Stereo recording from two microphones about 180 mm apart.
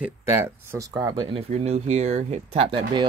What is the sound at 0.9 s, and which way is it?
Speech, 30° right (ahead or behind).